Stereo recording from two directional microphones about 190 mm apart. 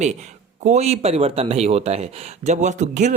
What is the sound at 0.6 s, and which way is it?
Speech, 35° right (ahead or behind).